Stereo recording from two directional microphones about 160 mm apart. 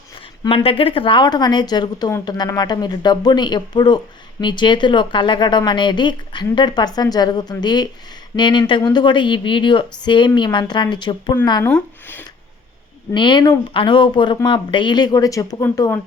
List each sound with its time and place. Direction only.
0.4 s speech: 35° left (ahead or behind)
11.6 s speech: 10° left (ahead or behind)
13.1 s speech: 30° left (ahead or behind)